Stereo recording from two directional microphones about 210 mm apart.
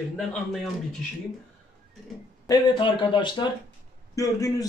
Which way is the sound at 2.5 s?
25° left (ahead or behind).